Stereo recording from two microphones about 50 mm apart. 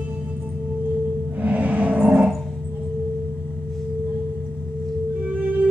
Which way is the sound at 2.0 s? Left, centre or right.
Centre.